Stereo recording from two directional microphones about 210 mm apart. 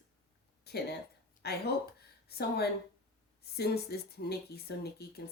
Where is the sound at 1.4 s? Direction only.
50° left (ahead or behind).